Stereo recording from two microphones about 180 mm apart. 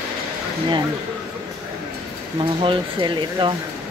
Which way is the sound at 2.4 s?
30° right (ahead or behind).